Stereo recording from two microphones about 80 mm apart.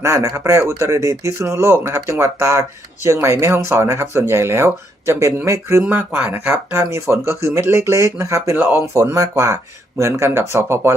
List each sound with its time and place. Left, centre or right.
0.0 s speech: right
5.8 s speech: right
8.5 s speech: right
9.0 s speech: right